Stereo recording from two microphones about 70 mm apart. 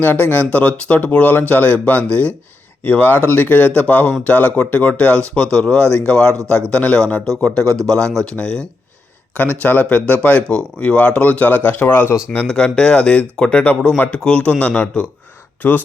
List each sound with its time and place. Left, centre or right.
0.0 s speech: left
9.6 s speech: left
12.5 s speech: centre
15.6 s speech: left